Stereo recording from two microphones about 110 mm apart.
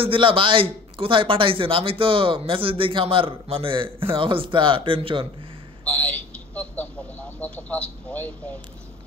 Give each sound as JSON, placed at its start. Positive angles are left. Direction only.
{"t": 0.0, "sound": "a man's voice", "side_deg": -55}
{"t": 5.9, "sound": "a sound", "side_deg": 15}
{"t": 7.3, "sound": "speech", "side_deg": 15}